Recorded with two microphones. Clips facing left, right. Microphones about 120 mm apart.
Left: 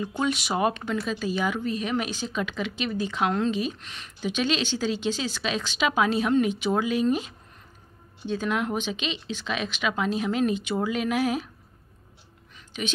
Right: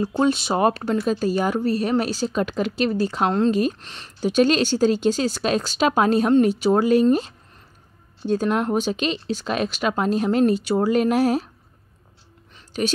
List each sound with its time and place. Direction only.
0.2 s speech: 30° right (ahead or behind)
8.3 s speech: 40° right (ahead or behind)